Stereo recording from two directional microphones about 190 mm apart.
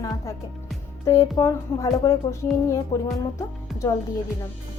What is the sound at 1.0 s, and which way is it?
Speech, 15° left (ahead or behind).